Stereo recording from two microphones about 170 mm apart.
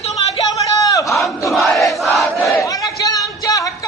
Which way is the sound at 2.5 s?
20° left (ahead or behind).